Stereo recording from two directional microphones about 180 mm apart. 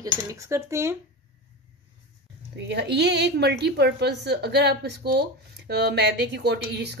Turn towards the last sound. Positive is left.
turn(degrees=-65)  # may be behind; listen again after turning